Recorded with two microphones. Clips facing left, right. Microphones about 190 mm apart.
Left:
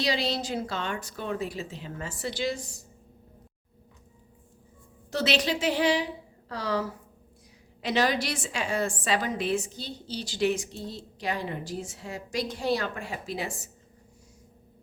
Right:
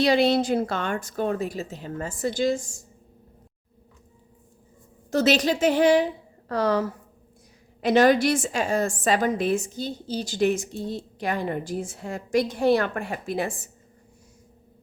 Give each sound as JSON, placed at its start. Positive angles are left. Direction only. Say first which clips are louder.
{"t": 0.0, "sound": "a woman's voice", "louder": "right 9 dB", "side_deg": -55}
{"t": 5.1, "sound": "a woman's voice", "louder": "right 6 dB", "side_deg": -45}